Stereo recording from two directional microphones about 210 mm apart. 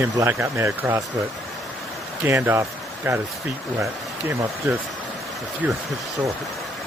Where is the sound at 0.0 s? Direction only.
10° right (ahead or behind).